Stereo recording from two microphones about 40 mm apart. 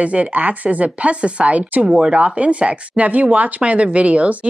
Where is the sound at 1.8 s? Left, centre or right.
Centre.